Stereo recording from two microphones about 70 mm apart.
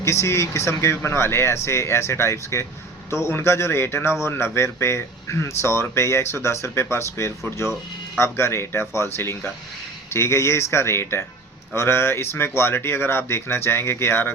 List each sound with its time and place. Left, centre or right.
0.0 s a man's voice: left